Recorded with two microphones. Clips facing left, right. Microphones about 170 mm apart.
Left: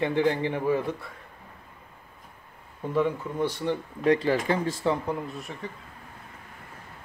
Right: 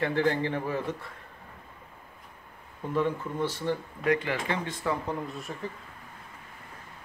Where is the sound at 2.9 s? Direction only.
15° left (ahead or behind).